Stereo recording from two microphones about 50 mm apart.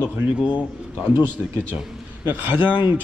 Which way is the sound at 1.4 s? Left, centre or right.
Right.